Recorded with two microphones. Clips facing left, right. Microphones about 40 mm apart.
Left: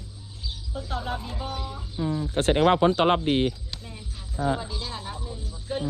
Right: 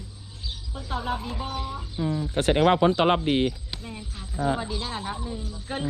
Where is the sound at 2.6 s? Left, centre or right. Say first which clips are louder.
Even; right.